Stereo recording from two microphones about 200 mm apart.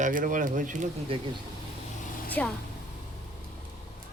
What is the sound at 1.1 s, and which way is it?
Speech, 25° right (ahead or behind).